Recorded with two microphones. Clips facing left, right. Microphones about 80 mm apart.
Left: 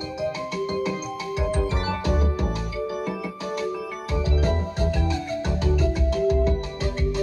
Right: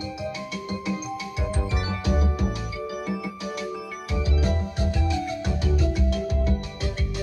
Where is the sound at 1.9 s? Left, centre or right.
Left.